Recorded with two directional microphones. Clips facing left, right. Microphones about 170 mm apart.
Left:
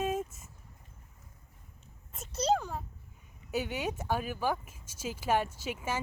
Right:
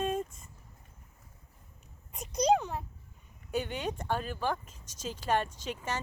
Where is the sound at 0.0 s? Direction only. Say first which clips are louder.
Even; 5° left (ahead or behind).